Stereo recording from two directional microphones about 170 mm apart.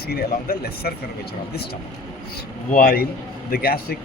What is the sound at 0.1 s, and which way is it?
Speech, 65° left (ahead or behind).